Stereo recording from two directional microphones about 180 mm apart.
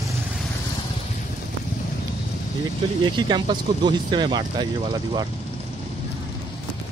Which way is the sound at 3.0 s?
25° right (ahead or behind).